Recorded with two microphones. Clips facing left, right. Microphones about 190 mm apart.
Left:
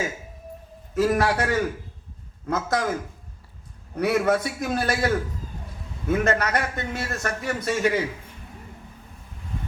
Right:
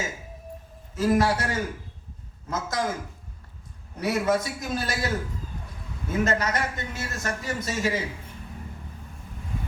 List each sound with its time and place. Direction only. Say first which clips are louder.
0.9 s a man's voice: left 1 dB; 60° left (ahead or behind)
3.9 s a man's voice: left 3 dB; 60° left (ahead or behind)